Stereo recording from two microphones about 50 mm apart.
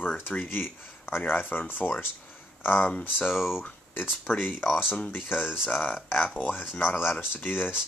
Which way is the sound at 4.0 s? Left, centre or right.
Left.